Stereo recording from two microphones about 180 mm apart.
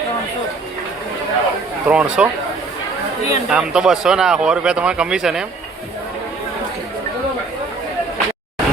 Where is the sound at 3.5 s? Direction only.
5° right (ahead or behind).